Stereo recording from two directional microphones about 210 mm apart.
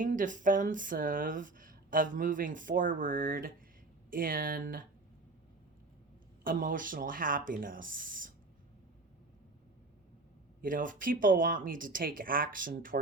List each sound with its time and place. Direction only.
0.0 s speech: 40° right (ahead or behind)
6.4 s speech: 40° right (ahead or behind)
10.6 s speech: 40° right (ahead or behind)